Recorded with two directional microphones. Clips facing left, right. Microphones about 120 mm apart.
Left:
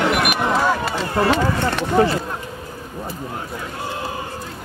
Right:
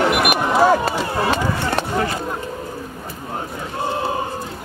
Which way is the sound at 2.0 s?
25° left (ahead or behind).